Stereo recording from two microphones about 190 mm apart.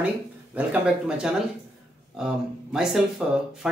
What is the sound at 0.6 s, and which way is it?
Speech, 5° right (ahead or behind).